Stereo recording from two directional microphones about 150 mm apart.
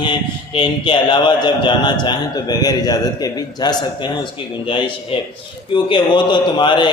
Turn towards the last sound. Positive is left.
turn(degrees=30)  # may be behind; listen again after turning